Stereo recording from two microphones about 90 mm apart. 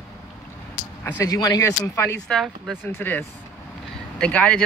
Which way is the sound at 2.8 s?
20° left (ahead or behind).